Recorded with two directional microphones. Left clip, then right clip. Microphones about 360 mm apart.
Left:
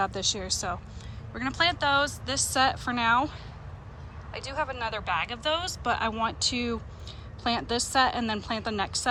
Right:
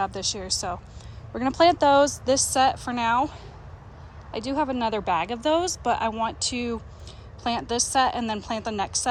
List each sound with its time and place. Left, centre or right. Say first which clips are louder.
0.0 s speech: right 1 dB; centre
4.4 s speech: right 5 dB; centre